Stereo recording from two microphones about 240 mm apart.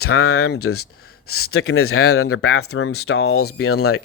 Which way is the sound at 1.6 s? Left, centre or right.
Left.